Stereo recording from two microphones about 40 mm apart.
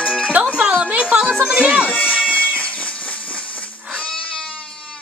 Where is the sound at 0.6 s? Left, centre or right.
Right.